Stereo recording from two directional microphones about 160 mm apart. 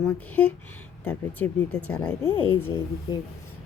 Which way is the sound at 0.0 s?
5° left (ahead or behind).